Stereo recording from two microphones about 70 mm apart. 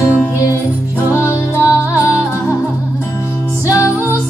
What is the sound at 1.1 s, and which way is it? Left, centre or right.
Music, left.